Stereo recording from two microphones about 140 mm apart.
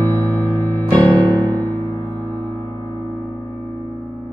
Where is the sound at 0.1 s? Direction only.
20° left (ahead or behind).